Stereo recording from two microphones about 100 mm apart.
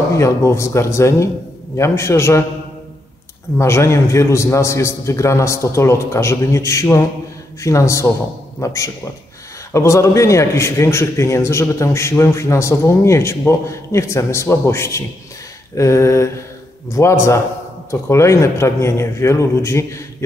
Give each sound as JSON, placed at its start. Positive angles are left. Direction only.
{"t": 0.1, "sound": "a man's voice", "side_deg": 30}
{"t": 3.5, "sound": "a man's voice", "side_deg": 30}